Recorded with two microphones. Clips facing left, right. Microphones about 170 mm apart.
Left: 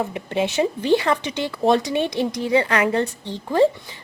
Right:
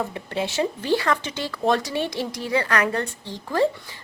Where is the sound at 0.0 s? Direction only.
20° left (ahead or behind).